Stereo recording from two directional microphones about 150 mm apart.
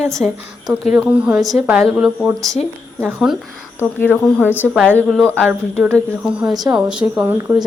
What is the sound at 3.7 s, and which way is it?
Speech, 10° left (ahead or behind).